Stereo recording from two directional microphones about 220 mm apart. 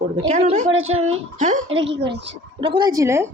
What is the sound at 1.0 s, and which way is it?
Speech, 30° right (ahead or behind).